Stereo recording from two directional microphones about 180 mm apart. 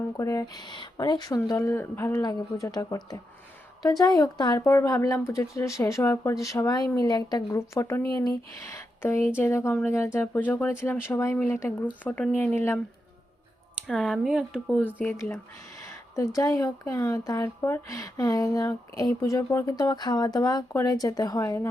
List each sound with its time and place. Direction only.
0.2 s speech: 20° left (ahead or behind)
13.8 s speech: centre (ahead or behind); by 21.7 s 15° left (ahead or behind)